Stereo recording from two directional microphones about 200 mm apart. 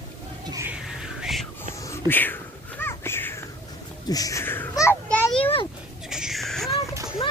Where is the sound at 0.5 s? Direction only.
15° right (ahead or behind).